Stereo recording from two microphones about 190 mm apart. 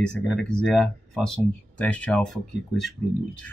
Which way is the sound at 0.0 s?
5° left (ahead or behind).